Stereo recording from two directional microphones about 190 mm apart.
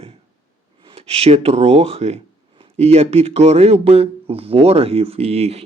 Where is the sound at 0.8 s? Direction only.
30° right (ahead or behind).